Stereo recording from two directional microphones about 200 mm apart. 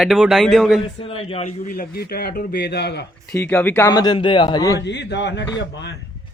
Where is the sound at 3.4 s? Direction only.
10° left (ahead or behind).